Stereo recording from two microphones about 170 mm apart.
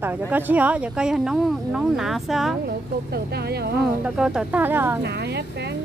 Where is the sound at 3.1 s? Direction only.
70° right (ahead or behind).